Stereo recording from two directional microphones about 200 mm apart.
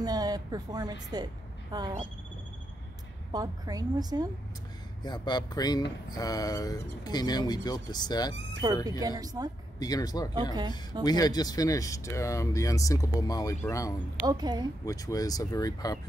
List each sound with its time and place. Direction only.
0.0 s a woman's voice: 20° right (ahead or behind)
3.3 s a woman's voice: 20° right (ahead or behind)
5.0 s speech: 20° left (ahead or behind)
9.2 s a woman's voice: 20° right (ahead or behind)
9.8 s speech: 20° left (ahead or behind)
10.3 s a woman's voice: 20° right (ahead or behind)
11.1 s speech: 20° left (ahead or behind)
14.2 s a woman's voice: 20° right (ahead or behind)
14.9 s speech: 15° left (ahead or behind)